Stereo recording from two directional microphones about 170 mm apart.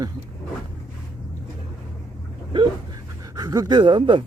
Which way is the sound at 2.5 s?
25° right (ahead or behind).